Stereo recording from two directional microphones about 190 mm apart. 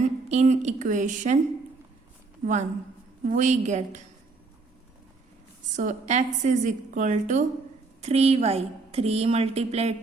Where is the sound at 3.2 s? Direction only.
40° right (ahead or behind).